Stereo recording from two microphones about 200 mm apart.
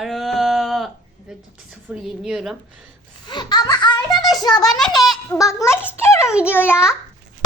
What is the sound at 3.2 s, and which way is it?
A child's voice, 20° left (ahead or behind).